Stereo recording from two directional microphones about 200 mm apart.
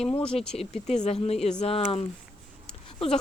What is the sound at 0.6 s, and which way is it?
Speech, 35° left (ahead or behind).